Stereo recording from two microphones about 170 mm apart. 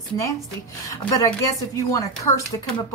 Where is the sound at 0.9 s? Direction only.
20° left (ahead or behind).